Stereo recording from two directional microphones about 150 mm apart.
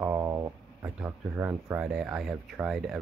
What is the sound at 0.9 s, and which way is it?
Speech, 10° right (ahead or behind).